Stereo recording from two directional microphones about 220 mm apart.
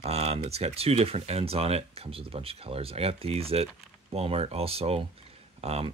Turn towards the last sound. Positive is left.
turn(degrees=-30)  # may be behind; listen again after turning